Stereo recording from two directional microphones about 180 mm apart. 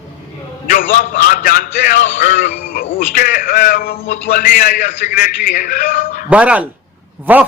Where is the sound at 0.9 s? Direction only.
45° left (ahead or behind).